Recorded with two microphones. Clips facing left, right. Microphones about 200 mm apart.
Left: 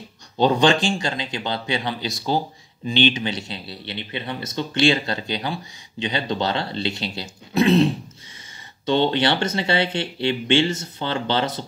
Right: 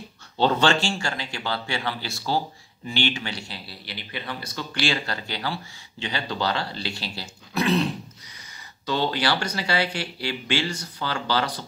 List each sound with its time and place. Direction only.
0.4 s speech: 15° left (ahead or behind)